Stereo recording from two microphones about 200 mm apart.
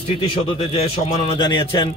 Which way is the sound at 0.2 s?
30° left (ahead or behind).